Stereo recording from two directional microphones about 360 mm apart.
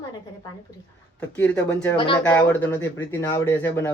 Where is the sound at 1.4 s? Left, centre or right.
Centre.